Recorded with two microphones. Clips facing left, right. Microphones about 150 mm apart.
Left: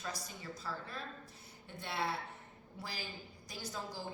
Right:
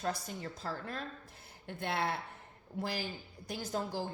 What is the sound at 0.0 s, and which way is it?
A woman's voice, 55° right (ahead or behind).